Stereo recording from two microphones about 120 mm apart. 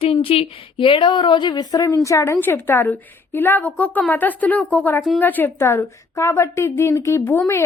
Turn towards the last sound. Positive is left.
turn(degrees=20)  # may be behind; listen again after turning